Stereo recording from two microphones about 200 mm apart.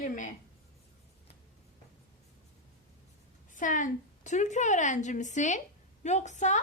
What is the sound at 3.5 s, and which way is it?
A woman's voice, 40° left (ahead or behind).